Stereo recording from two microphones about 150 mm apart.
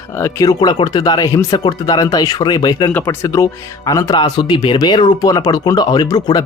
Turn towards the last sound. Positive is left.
turn(degrees=30)  # may be behind; listen again after turning